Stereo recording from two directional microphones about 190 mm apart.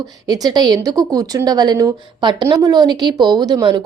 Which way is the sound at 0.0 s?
20° right (ahead or behind).